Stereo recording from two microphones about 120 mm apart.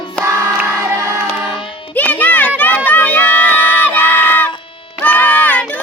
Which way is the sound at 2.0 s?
15° left (ahead or behind).